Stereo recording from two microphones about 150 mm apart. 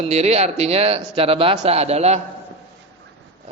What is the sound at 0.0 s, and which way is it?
Speech, 45° right (ahead or behind).